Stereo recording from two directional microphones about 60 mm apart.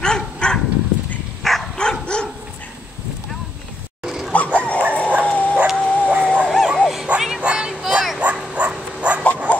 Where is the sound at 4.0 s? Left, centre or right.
Centre.